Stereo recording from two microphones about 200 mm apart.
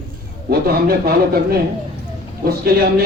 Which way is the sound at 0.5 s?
50° right (ahead or behind).